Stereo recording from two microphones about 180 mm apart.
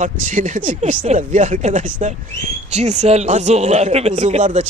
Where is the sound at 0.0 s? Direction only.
45° right (ahead or behind).